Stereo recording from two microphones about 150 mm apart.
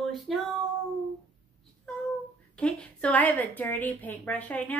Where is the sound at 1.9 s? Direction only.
5° left (ahead or behind).